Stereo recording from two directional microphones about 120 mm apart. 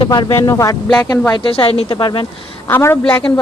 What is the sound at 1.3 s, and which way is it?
Speech, 45° left (ahead or behind).